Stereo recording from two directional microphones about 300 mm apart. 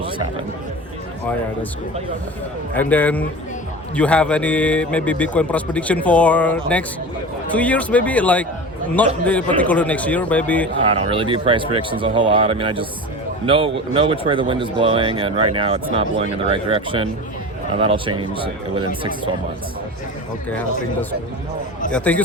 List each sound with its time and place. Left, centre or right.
2.7 s a man's voice: centre
10.8 s speech: centre
21.9 s a man's voice: centre